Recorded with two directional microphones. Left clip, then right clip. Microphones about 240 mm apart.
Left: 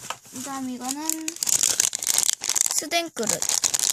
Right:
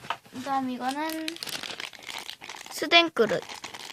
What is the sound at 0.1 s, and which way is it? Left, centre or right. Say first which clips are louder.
Crumpling: right 5 dB; left.